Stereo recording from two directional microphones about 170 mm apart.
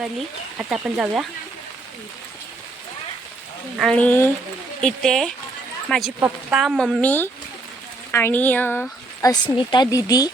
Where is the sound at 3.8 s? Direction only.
5° left (ahead or behind).